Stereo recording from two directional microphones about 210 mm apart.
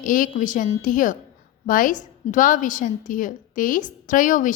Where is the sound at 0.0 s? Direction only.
40° left (ahead or behind).